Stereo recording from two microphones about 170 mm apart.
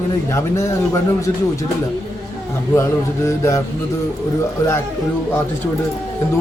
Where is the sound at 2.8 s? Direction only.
15° left (ahead or behind).